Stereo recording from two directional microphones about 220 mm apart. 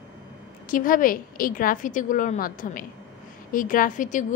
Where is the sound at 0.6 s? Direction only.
40° left (ahead or behind).